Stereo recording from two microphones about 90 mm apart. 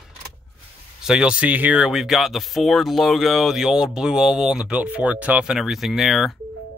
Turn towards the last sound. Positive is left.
turn(degrees=0)  # may be behind; listen again after turning